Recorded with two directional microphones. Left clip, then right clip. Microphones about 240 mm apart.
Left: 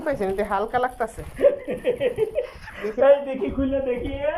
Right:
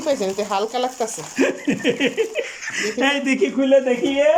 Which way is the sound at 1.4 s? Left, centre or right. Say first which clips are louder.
Even; right.